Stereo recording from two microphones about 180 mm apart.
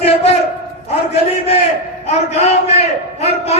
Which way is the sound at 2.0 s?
35° left (ahead or behind).